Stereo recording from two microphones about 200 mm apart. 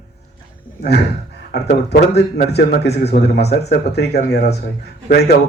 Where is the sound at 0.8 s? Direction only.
55° left (ahead or behind).